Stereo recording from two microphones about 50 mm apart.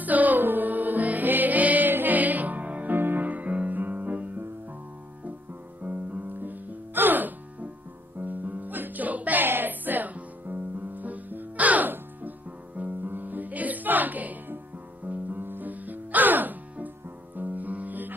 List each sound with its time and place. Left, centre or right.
0.0 s music: right
5.8 s music: right